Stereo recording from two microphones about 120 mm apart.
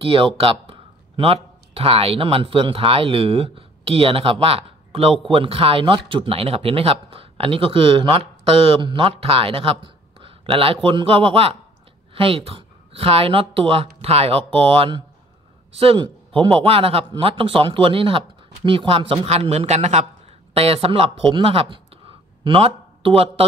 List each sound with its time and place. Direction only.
0.0 s speech: 50° right (ahead or behind)
19.5 s speech: 70° right (ahead or behind)
20.5 s speech: 55° right (ahead or behind)